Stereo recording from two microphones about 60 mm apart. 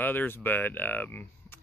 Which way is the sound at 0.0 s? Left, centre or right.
Left.